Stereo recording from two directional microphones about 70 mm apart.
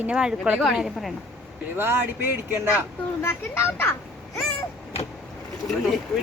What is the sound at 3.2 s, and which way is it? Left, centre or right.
Speech, left.